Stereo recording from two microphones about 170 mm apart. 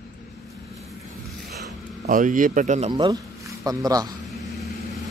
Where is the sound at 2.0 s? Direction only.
50° right (ahead or behind).